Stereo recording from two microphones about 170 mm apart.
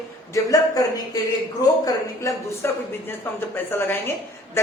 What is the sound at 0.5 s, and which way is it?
A man's voice, 20° left (ahead or behind).